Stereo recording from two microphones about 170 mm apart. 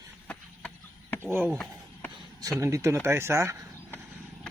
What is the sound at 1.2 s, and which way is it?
Speech, 15° right (ahead or behind).